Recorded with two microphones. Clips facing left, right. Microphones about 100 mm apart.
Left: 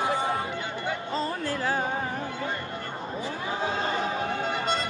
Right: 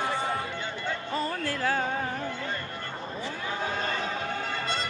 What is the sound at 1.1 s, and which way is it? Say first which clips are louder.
Music: even; 20° left (ahead or behind).